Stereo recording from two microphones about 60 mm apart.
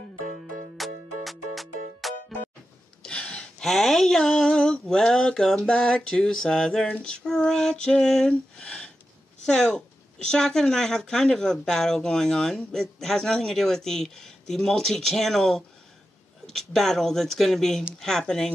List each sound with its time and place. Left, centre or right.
0.7 s music: centre
3.0 s gasp: centre
3.6 s a sound: centre
9.5 s speech: centre